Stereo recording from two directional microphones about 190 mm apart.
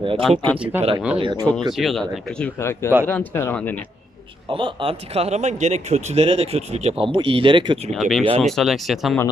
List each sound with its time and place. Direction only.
0.2 s speech: centre (ahead or behind)
1.1 s speech: 25° right (ahead or behind)
1.7 s speech: centre (ahead or behind)
2.6 s speech: 15° left (ahead or behind)
4.5 s speech: 25° right (ahead or behind)
7.9 s speech: centre (ahead or behind)